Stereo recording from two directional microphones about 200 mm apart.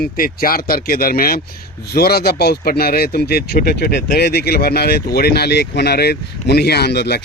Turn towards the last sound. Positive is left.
turn(degrees=55)  # may be behind; listen again after turning